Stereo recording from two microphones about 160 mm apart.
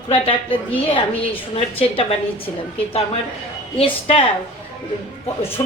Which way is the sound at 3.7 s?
35° left (ahead or behind).